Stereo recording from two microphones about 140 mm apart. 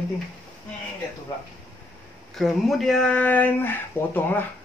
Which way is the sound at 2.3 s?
Centre (ahead or behind).